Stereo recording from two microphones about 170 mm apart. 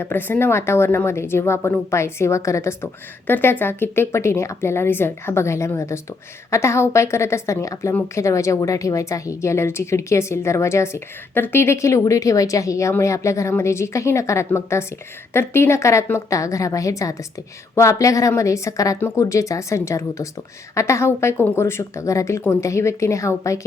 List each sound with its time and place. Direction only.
0.0 s a woman's voice: 10° left (ahead or behind)